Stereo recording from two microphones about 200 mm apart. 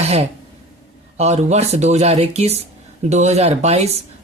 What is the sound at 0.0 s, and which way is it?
Throat clearing, 30° right (ahead or behind).